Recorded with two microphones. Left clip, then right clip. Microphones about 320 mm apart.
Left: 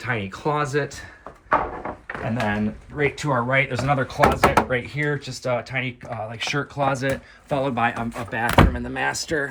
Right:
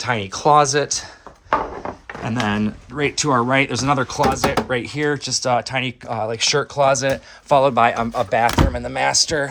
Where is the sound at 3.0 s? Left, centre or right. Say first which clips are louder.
Right 4 dB; centre.